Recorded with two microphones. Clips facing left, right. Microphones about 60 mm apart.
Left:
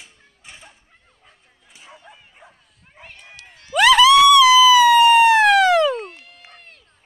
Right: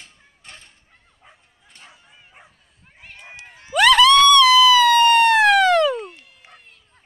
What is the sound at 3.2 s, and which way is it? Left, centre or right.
Dog, right.